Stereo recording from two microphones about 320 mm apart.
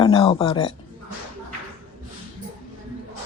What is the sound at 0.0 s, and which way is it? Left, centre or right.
Speech, centre.